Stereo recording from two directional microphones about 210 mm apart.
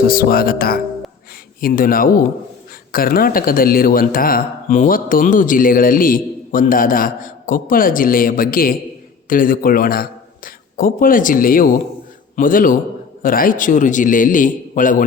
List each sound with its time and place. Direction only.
0.0 s a man's voice: 45° left (ahead or behind)